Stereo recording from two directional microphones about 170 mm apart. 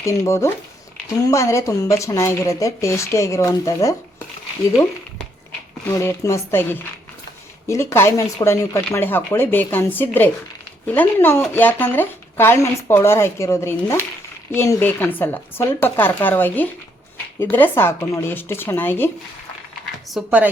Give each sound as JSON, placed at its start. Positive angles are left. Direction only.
{"t": 0.0, "sound": "speech", "side_deg": 15}
{"t": 20.1, "sound": "speech", "side_deg": -5}